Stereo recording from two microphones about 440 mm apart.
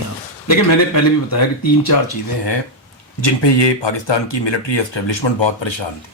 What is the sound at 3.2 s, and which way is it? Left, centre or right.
Speech, left.